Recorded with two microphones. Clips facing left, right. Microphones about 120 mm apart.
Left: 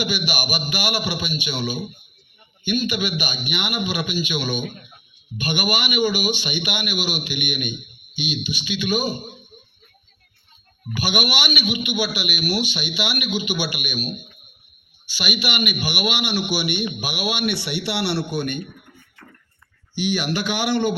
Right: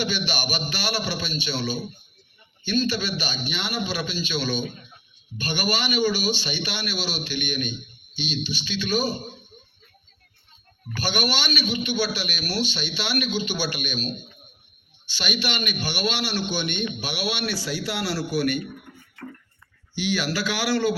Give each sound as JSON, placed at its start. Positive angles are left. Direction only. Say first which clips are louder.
{"t": 0.0, "sound": "a man's voice", "louder": "left 2 dB", "side_deg": 10}
{"t": 4.6, "sound": "speech", "louder": "left 1 dB", "side_deg": 55}
{"t": 5.4, "sound": "a man's voice", "louder": "left 2 dB", "side_deg": 15}
{"t": 10.9, "sound": "a man's voice", "louder": "left 2 dB", "side_deg": 10}
{"t": 17.5, "sound": "speech", "louder": "left 3 dB", "side_deg": 70}
{"t": 18.0, "sound": "speech", "louder": "right 2 dB", "side_deg": 25}
{"t": 20.0, "sound": "speech", "louder": "left 2 dB", "side_deg": 15}